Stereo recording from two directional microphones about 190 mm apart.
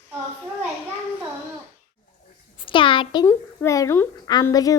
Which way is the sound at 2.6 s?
25° left (ahead or behind).